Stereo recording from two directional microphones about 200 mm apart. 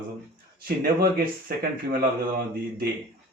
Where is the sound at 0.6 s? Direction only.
50° right (ahead or behind).